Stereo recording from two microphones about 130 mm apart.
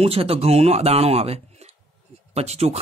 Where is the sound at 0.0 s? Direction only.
50° right (ahead or behind).